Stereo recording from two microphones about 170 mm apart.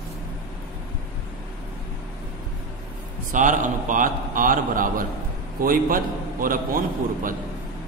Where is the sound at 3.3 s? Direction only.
50° right (ahead or behind).